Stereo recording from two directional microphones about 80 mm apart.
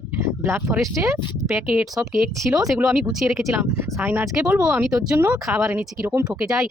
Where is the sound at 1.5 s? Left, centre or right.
Centre.